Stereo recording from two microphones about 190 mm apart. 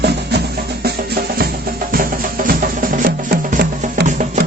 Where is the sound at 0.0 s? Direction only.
60° right (ahead or behind).